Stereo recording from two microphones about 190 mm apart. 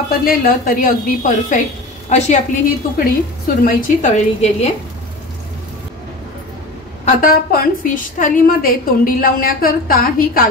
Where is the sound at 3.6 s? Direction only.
40° left (ahead or behind).